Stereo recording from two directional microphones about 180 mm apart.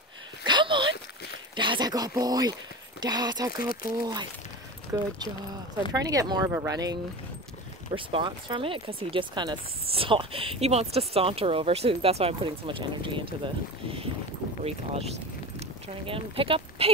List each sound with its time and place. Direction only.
0.5 s a sound: 25° right (ahead or behind)
1.6 s speech: 25° right (ahead or behind)
14.6 s speech: 35° right (ahead or behind)